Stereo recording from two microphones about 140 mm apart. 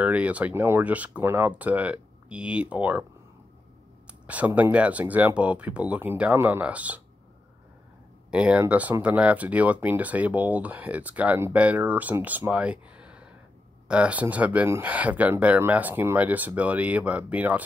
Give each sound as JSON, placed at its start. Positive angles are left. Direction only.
{"t": 0.0, "sound": "speech", "side_deg": -10}
{"t": 4.1, "sound": "speech", "side_deg": -10}
{"t": 8.3, "sound": "speech", "side_deg": -5}